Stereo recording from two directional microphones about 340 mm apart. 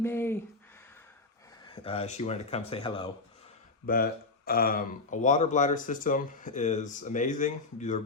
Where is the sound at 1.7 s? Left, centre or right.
Centre.